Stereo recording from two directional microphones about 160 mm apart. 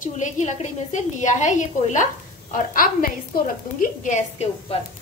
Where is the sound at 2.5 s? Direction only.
65° left (ahead or behind).